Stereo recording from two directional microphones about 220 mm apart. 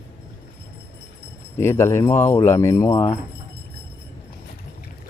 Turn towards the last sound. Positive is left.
turn(degrees=15)  # may be behind; listen again after turning